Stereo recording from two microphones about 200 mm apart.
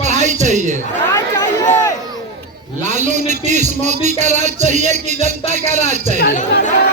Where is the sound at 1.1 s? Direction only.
15° left (ahead or behind).